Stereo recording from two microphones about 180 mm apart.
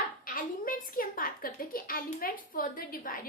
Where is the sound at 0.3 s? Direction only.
50° left (ahead or behind).